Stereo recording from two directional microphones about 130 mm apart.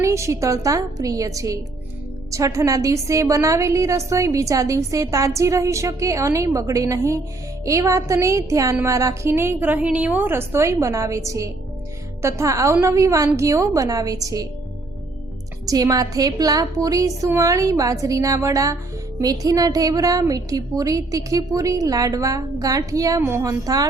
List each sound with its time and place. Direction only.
0.0 s a woman's voice: 25° right (ahead or behind)
15.6 s a woman's voice: 25° right (ahead or behind)